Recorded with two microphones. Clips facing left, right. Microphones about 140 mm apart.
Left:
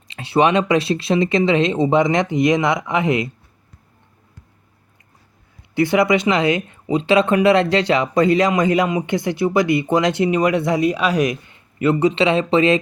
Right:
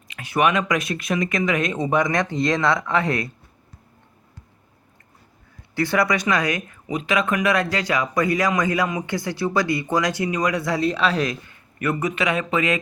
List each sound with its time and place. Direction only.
0.1 s speech: 30° left (ahead or behind)
5.7 s speech: 20° left (ahead or behind)